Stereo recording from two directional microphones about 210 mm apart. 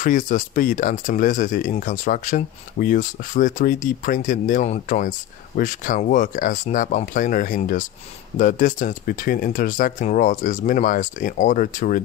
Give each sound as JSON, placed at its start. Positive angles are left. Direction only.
{"t": 0.0, "sound": "speech", "side_deg": 40}